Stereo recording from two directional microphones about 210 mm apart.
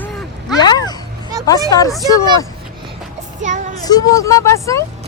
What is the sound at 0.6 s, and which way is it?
Speech, 20° left (ahead or behind).